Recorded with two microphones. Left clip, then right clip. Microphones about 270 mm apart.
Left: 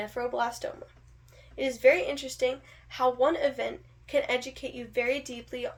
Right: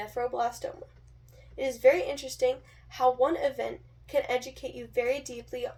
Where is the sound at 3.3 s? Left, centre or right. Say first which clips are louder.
Left 1 dB; centre.